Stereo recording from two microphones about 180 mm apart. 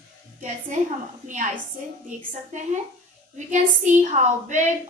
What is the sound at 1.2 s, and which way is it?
Speech, 45° right (ahead or behind).